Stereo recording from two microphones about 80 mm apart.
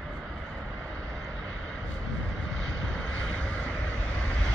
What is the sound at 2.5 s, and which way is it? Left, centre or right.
Vehicle, centre.